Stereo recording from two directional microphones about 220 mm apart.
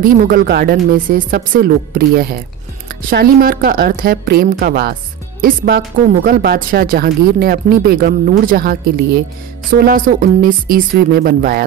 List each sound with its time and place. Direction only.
0.0 s speech: 40° right (ahead or behind)